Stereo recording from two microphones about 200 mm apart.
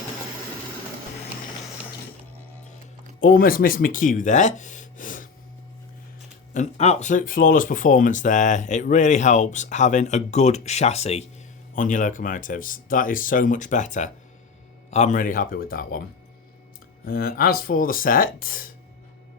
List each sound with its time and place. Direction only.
3.2 s speech: 45° left (ahead or behind)
6.5 s speech: 35° left (ahead or behind)
17.1 s speech: 50° left (ahead or behind)